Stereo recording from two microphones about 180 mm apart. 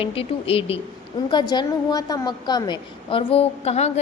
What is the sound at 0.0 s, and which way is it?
A woman's voice, 30° left (ahead or behind).